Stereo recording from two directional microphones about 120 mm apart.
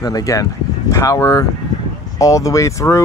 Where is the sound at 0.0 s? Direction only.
30° left (ahead or behind).